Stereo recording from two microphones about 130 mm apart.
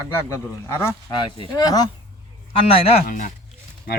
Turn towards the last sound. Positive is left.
turn(degrees=75)  # may be behind; listen again after turning